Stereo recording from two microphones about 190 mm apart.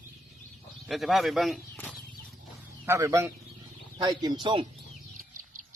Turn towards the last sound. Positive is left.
turn(degrees=-25)  # may be behind; listen again after turning